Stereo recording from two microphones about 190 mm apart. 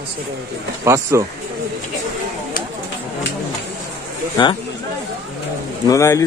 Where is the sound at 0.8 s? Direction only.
15° right (ahead or behind).